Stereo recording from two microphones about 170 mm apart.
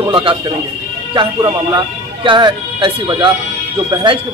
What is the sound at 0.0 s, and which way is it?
Speech, 30° right (ahead or behind).